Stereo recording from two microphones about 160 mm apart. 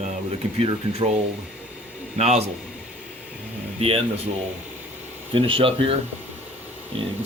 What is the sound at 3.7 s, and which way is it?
Speech, 35° right (ahead or behind).